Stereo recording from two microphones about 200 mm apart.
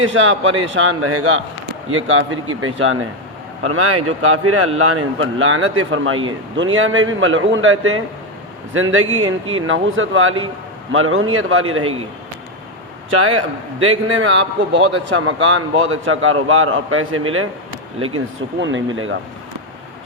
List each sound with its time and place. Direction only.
0.0 s a man's voice: 80° right
9.1 s a man's voice: 75° right (ahead or behind)
13.3 s a man's voice: 90° right
14.7 s a man's voice: 75° right (ahead or behind)